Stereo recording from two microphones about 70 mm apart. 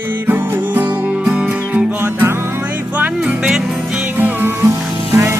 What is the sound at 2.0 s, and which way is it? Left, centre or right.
Music, right.